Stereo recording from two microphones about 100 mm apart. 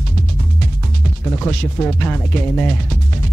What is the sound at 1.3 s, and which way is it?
Speech, 15° left (ahead or behind).